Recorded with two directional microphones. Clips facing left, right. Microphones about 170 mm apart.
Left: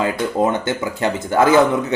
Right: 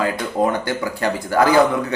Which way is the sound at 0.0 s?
20° left (ahead or behind).